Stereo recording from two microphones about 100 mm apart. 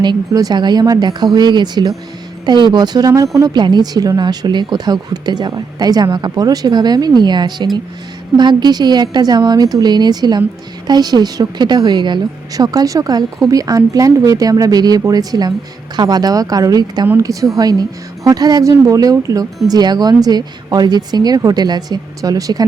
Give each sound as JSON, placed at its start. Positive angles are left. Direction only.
{"t": 0.0, "sound": "a woman's voice", "side_deg": -45}